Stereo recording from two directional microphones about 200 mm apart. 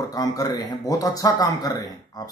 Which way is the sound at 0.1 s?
20° left (ahead or behind).